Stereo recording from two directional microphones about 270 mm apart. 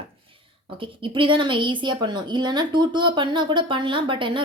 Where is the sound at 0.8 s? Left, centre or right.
Centre.